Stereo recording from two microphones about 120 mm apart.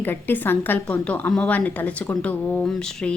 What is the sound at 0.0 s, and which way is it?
A woman's voice, 15° left (ahead or behind).